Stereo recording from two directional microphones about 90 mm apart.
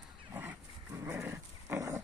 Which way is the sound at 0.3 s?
25° right (ahead or behind).